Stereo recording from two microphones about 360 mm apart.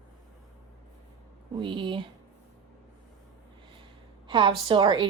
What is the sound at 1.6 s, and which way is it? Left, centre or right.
Speech, centre.